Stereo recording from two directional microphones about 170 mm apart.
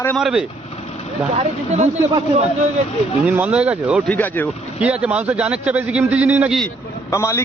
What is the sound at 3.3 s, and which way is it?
Speech, 10° right (ahead or behind).